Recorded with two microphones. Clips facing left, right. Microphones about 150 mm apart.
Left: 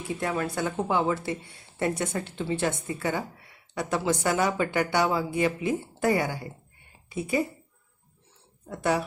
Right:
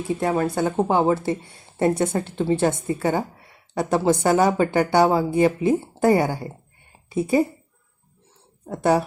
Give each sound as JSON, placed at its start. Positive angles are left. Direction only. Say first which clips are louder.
{"t": 0.1, "sound": "speech", "louder": "right 7 dB", "side_deg": -35}
{"t": 8.6, "sound": "speech", "louder": "right 7 dB", "side_deg": -35}